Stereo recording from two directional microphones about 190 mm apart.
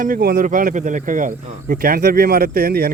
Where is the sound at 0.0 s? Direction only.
50° right (ahead or behind).